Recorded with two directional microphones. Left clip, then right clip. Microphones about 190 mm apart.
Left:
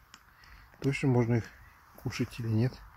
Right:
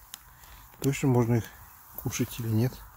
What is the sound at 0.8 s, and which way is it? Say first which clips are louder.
Speech: right 3 dB; 5° left (ahead or behind).